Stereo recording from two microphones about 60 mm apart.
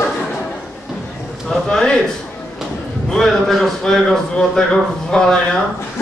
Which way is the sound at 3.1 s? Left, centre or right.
Centre.